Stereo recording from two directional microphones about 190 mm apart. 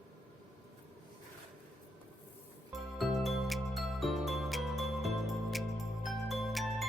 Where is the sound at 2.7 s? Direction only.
Centre (ahead or behind).